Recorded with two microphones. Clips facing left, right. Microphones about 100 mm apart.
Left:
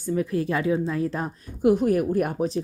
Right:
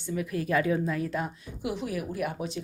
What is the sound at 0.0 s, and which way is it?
Speech, 35° left (ahead or behind).